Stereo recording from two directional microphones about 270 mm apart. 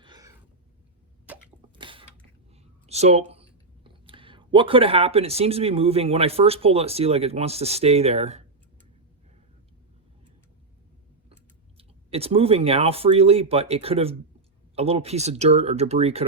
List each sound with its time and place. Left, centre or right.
0.0 s a sound: centre
1.7 s mechanisms: centre
2.8 s speech: right
11.8 s speech: right